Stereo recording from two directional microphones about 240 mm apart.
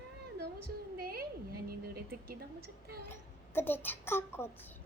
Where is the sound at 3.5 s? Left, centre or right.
Centre.